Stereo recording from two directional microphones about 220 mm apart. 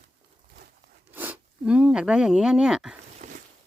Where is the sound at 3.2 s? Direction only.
35° right (ahead or behind).